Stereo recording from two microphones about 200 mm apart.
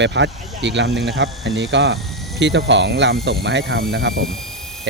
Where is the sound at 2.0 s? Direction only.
Centre (ahead or behind).